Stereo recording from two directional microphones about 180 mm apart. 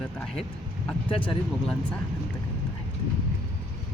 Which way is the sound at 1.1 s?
30° left (ahead or behind).